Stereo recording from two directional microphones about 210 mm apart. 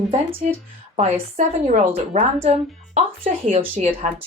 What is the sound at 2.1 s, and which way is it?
A woman's voice, 30° right (ahead or behind).